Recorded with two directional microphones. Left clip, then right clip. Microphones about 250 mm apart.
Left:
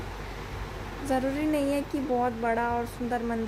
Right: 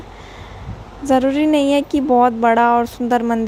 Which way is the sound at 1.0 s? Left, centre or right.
Right.